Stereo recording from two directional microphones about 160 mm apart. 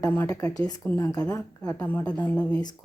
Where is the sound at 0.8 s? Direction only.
10° left (ahead or behind).